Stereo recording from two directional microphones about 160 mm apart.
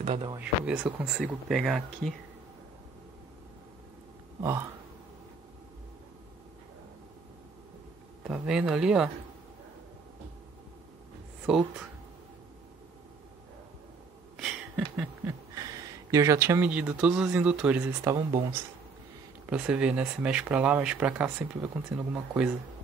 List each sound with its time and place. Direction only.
0.0 s speech: 40° right (ahead or behind)
0.4 s speech: 5° right (ahead or behind)
4.4 s a sound: 15° right (ahead or behind)
8.2 s speech: 5° right (ahead or behind)
11.5 s speech: centre (ahead or behind)
15.0 s a sound: 15° right (ahead or behind)
16.1 s speech: 20° right (ahead or behind)
18.1 s speech: 30° right (ahead or behind)
19.5 s speech: 5° right (ahead or behind)